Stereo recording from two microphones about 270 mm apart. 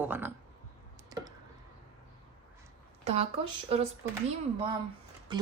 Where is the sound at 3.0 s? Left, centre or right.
Right.